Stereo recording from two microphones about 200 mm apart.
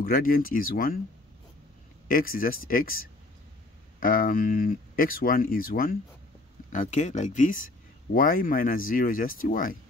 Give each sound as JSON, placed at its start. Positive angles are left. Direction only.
{"t": 0.0, "sound": "speech", "side_deg": 45}
{"t": 2.0, "sound": "speech", "side_deg": 45}